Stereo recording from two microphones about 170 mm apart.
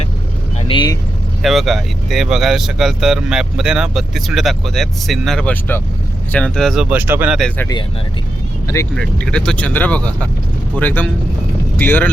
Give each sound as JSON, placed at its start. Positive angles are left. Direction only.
{"t": 0.7, "sound": "speech", "side_deg": 25}
{"t": 1.4, "sound": "speech", "side_deg": 0}
{"t": 6.9, "sound": "speech", "side_deg": -10}
{"t": 7.3, "sound": "speech", "side_deg": 5}
{"t": 8.6, "sound": "speech", "side_deg": 15}
{"t": 9.0, "sound": "speech", "side_deg": 5}